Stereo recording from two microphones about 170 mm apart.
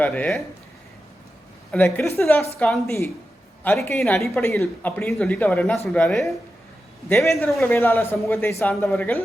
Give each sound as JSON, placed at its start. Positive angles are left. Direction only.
{"t": 0.0, "sound": "speech", "side_deg": 5}
{"t": 1.7, "sound": "a woman's voice", "side_deg": 5}
{"t": 2.2, "sound": "speech", "side_deg": 15}
{"t": 2.6, "sound": "a woman's voice", "side_deg": 5}
{"t": 7.1, "sound": "speech", "side_deg": 15}